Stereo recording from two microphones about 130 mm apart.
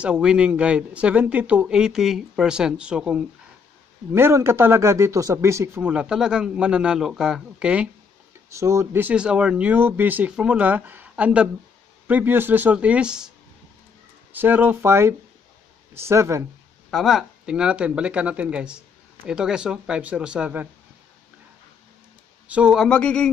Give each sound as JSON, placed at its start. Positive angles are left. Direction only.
{"t": 0.0, "sound": "speech", "side_deg": -5}
{"t": 4.1, "sound": "a man's voice", "side_deg": -20}
{"t": 5.8, "sound": "speech", "side_deg": -10}
{"t": 8.5, "sound": "speech", "side_deg": -20}
{"t": 14.3, "sound": "a man's voice", "side_deg": -15}
{"t": 16.9, "sound": "speech", "side_deg": 0}
{"t": 22.5, "sound": "speech", "side_deg": -5}
{"t": 22.8, "sound": "speech", "side_deg": 10}